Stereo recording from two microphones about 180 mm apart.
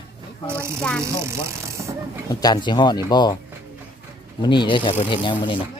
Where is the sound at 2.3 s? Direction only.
20° left (ahead or behind).